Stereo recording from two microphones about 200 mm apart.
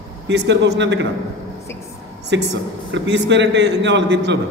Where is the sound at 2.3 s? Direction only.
60° right (ahead or behind).